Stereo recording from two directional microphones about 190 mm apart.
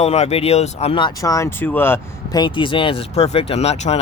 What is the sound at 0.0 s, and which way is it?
Speech, 35° left (ahead or behind).